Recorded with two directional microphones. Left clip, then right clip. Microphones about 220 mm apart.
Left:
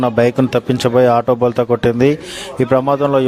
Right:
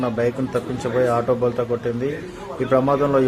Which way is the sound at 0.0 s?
40° left (ahead or behind).